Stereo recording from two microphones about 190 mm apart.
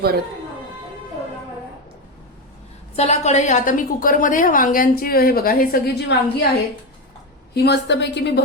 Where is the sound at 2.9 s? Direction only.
35° left (ahead or behind); by 6.2 s 55° left (ahead or behind).